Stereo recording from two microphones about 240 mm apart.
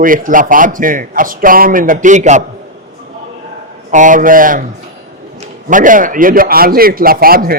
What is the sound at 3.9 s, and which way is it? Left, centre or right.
Speech, right.